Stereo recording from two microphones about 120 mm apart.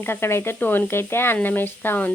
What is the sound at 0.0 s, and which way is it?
Speech, 20° left (ahead or behind).